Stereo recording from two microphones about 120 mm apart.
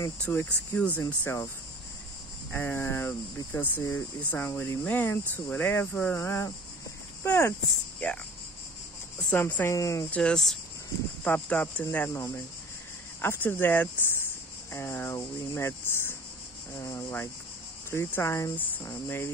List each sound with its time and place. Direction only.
0.2 s speech: 15° left (ahead or behind)
2.5 s speech: 20° left (ahead or behind)
7.6 s speech: 10° left (ahead or behind)
9.3 s speech: 15° left (ahead or behind)
10.1 s speech: 5° left (ahead or behind)
11.2 s speech: 15° left (ahead or behind)